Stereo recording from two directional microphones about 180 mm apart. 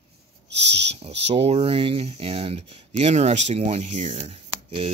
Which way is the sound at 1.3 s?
35° right (ahead or behind).